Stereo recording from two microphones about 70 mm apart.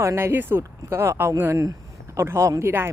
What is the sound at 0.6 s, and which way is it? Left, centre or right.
Speech, right.